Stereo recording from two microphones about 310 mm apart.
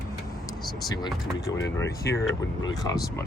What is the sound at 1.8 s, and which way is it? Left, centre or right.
Speech, centre.